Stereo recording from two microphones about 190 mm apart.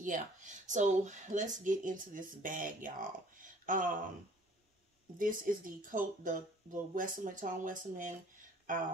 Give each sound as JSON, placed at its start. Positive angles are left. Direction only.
{"t": 0.0, "sound": "speech", "side_deg": -40}
{"t": 5.2, "sound": "speech", "side_deg": -45}